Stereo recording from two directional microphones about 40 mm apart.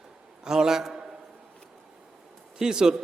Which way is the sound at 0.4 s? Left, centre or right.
Centre.